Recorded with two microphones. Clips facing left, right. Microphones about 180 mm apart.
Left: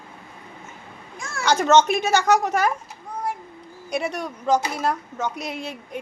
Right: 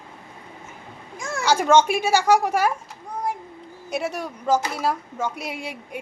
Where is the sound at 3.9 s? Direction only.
5° right (ahead or behind).